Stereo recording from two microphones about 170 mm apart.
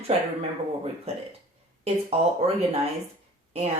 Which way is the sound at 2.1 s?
35° right (ahead or behind).